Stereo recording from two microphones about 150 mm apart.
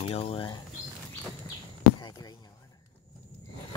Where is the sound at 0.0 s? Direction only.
40° left (ahead or behind).